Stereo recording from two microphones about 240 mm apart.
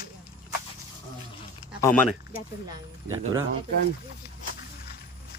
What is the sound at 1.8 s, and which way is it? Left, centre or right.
Speech, centre.